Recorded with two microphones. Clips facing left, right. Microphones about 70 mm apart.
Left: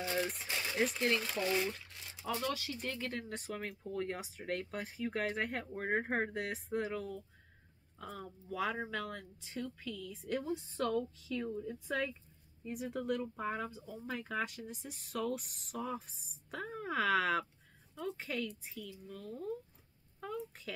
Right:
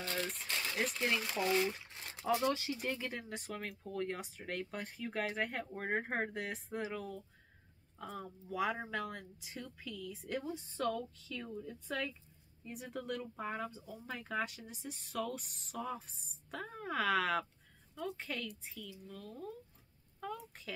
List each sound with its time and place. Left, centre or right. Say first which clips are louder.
0.0 s speech: left 3 dB; centre
2.0 s a sound: right 3 dB; right
2.4 s speech: right 3 dB; right
2.8 s speech: even; centre